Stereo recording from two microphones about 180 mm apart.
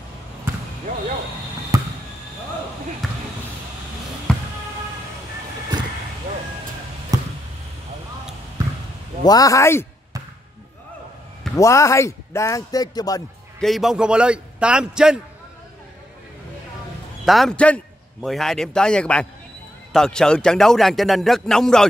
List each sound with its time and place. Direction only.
1.7 s basketball bounce: 20° right (ahead or behind)
3.0 s basketball bounce: centre (ahead or behind)
4.3 s music: 5° left (ahead or behind)
7.1 s basketball bounce: 20° right (ahead or behind)
9.2 s speech: 20° left (ahead or behind)
11.5 s speech: 15° left (ahead or behind)
13.6 s speech: centre (ahead or behind)
17.2 s a man's voice: centre (ahead or behind)